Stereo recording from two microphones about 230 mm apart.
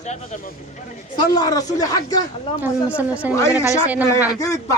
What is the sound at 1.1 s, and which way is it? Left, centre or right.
A man's voice, centre.